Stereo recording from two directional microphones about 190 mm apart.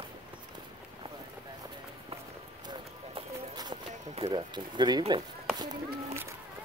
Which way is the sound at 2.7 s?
20° right (ahead or behind).